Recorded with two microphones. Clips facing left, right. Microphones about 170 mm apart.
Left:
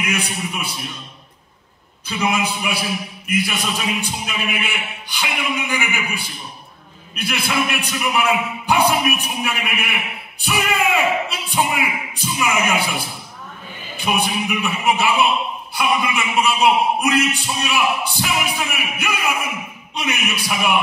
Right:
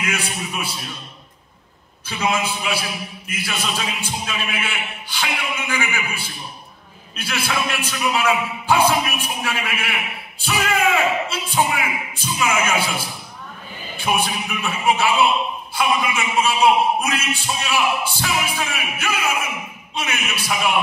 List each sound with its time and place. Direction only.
0.0 s a man's voice: 20° left (ahead or behind)
2.3 s a man's voice: 15° left (ahead or behind)